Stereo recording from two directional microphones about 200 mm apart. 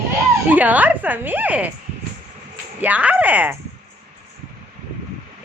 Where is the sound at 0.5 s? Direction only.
10° right (ahead or behind).